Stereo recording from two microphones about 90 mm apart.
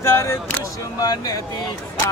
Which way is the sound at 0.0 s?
30° left (ahead or behind).